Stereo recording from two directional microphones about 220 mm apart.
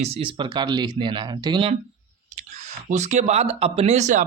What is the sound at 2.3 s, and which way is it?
Speech, 35° right (ahead or behind).